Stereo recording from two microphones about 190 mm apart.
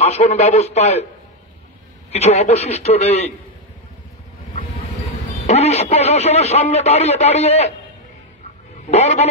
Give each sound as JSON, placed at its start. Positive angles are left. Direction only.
{"t": 0.0, "sound": "speech", "side_deg": 35}
{"t": 2.0, "sound": "speech", "side_deg": 35}
{"t": 5.5, "sound": "speech", "side_deg": 35}
{"t": 8.9, "sound": "speech", "side_deg": 35}